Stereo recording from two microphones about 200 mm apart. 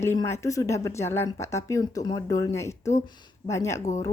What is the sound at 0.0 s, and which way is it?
Speech, 15° left (ahead or behind).